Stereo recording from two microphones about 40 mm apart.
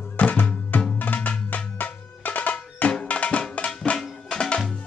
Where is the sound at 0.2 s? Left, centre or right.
Left.